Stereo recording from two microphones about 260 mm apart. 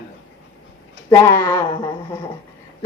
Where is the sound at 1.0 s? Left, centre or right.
Centre.